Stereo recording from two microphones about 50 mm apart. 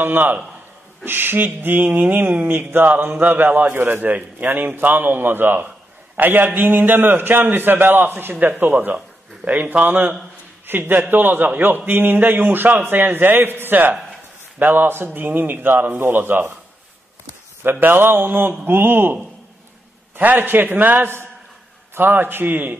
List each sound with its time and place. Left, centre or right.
0.0 s a man's voice: right
8.9 s a man's voice: right
17.6 s mantra: right
20.2 s a man's voice: right
21.9 s mantra: right